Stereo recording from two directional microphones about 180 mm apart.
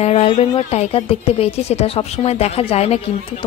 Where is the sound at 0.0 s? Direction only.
35° left (ahead or behind).